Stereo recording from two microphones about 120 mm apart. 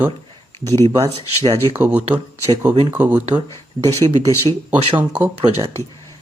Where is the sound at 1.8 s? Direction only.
10° right (ahead or behind).